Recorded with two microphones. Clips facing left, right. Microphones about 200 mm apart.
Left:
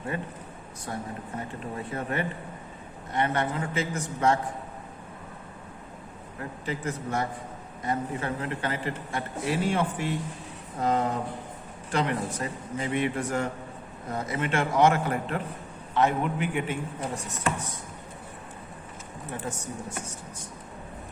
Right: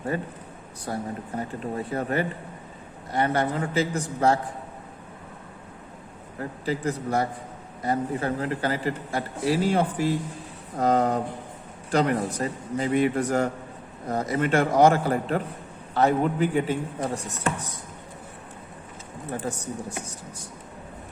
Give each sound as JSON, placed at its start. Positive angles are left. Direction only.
{"t": 0.9, "sound": "speech", "side_deg": -40}
{"t": 6.4, "sound": "speech", "side_deg": -35}
{"t": 19.5, "sound": "speech", "side_deg": -35}